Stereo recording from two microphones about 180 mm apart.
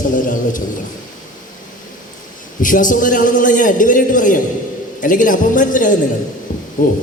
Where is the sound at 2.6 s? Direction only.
45° left (ahead or behind).